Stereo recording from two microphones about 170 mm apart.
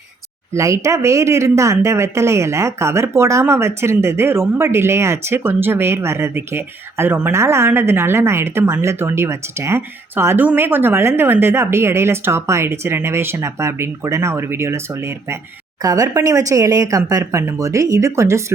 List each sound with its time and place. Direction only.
0.5 s speech: 20° right (ahead or behind)